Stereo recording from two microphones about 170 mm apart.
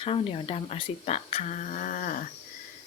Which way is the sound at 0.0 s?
35° left (ahead or behind).